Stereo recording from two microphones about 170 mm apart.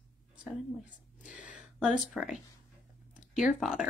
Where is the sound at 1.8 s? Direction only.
5° right (ahead or behind).